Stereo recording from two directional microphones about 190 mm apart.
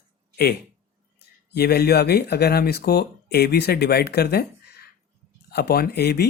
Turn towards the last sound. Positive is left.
turn(degrees=55)  # may be behind; listen again after turning